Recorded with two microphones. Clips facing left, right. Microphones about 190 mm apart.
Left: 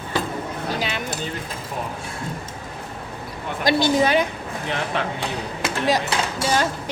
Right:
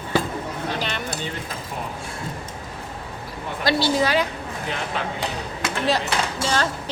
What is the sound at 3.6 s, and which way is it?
Speech, 20° left (ahead or behind).